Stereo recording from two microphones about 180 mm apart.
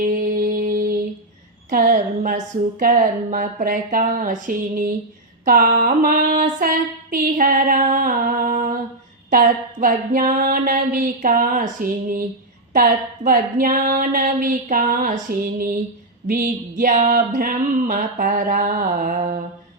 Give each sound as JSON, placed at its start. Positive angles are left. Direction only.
{"t": 0.0, "sound": "music", "side_deg": -50}
{"t": 1.7, "sound": "a woman's voice", "side_deg": -50}